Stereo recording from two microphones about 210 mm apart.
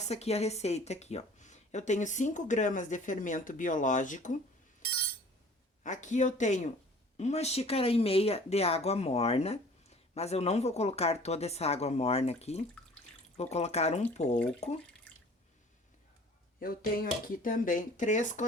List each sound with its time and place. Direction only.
0.0 s a woman's voice: 30° left (ahead or behind)
5.8 s a woman's voice: 35° left (ahead or behind)
16.6 s a woman's voice: 45° left (ahead or behind)